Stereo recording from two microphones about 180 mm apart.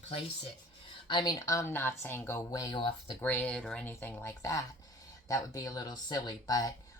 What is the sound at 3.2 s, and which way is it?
Speech, 10° left (ahead or behind).